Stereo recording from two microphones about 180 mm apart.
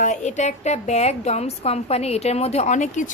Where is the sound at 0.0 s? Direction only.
40° left (ahead or behind).